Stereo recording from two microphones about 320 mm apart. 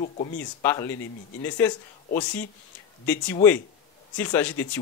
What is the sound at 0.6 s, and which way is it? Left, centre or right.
Speech, centre.